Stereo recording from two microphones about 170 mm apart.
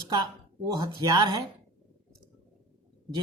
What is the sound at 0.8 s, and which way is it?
Speech, 25° right (ahead or behind).